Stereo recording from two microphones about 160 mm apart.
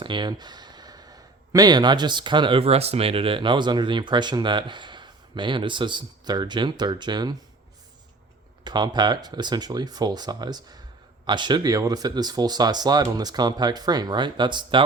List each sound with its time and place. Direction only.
0.0 s speech: 30° right (ahead or behind)
8.6 s speech: 25° right (ahead or behind)